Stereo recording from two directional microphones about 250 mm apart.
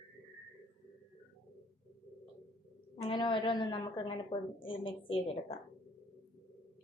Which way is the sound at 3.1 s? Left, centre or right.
Centre.